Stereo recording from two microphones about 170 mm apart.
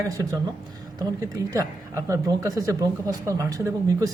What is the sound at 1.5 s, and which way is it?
Speech, 20° right (ahead or behind).